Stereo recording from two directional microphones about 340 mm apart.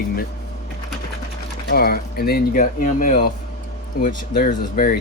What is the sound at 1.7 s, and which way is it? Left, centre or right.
Speech, left.